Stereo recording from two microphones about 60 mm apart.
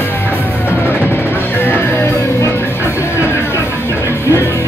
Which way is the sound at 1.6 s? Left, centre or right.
Left.